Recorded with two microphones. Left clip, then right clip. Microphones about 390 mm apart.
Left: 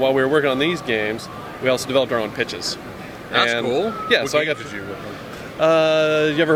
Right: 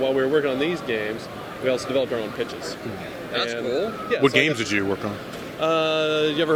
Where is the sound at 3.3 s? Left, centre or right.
Left.